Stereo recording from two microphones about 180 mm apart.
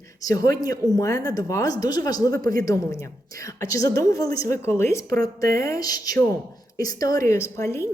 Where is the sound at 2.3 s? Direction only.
50° right (ahead or behind).